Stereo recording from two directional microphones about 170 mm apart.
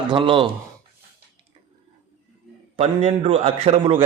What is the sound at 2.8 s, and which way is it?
A man's voice, 35° right (ahead or behind).